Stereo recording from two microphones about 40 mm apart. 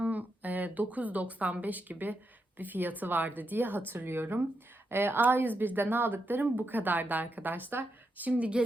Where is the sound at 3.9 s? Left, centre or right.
Right.